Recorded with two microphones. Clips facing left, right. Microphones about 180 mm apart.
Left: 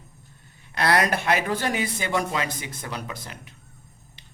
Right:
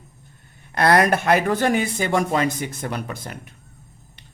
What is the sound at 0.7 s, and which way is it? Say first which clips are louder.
Speech: right 5 dB; 50° right (ahead or behind).